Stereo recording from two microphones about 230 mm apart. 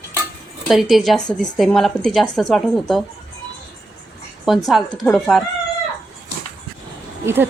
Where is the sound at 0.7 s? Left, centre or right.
Centre.